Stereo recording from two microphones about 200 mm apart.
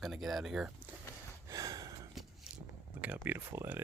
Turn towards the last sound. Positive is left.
turn(degrees=-10)  # may be behind; listen again after turning